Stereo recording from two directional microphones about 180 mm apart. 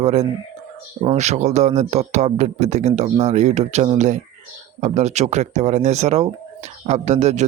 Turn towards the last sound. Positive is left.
turn(degrees=-40)  # may be behind; listen again after turning